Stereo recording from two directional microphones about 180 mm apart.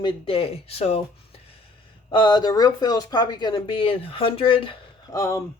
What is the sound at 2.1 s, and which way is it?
Speech, 25° left (ahead or behind).